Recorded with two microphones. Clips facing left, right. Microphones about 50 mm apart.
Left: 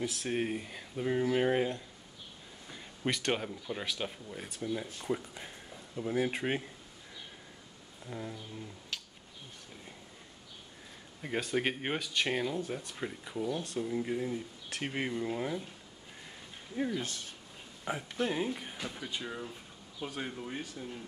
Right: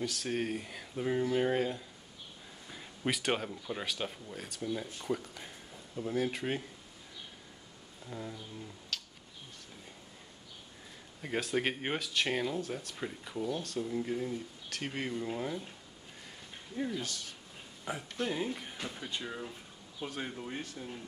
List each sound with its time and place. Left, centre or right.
0.0 s speech: centre
1.2 s speech: centre
2.7 s speech: centre; by 6.6 s left
8.1 s speech: centre
8.9 s a sound: centre
11.2 s speech: centre
16.7 s speech: centre
17.0 s speech: left
17.8 s speech: centre